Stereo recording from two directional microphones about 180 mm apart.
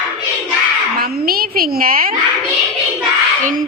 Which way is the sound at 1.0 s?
55° right (ahead or behind).